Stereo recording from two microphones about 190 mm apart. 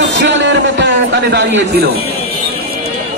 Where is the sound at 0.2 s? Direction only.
70° right (ahead or behind).